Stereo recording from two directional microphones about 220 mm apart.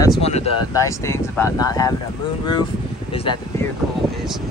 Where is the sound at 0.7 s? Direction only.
15° left (ahead or behind).